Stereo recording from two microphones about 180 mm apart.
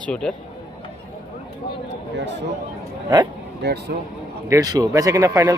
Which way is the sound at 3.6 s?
65° right (ahead or behind).